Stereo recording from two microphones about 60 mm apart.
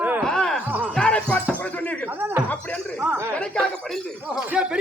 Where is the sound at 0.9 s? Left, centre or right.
Centre.